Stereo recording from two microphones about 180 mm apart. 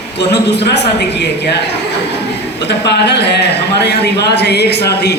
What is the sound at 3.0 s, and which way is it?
A man's voice, 70° left (ahead or behind).